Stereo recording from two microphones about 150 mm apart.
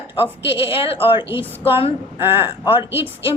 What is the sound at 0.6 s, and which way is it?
Speech, 40° left (ahead or behind).